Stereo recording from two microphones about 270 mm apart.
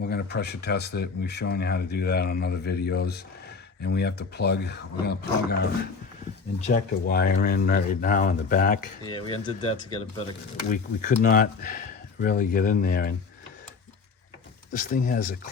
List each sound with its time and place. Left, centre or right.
0.0 s speech: left
9.0 s speech: centre
10.7 s speech: left
14.7 s speech: left